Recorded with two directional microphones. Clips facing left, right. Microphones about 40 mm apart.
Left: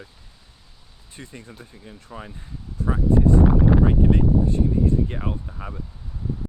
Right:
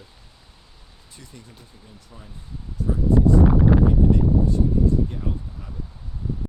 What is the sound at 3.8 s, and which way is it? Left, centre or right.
Speech, left.